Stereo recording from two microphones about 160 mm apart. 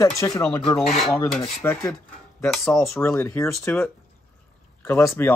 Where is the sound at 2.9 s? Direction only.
15° left (ahead or behind).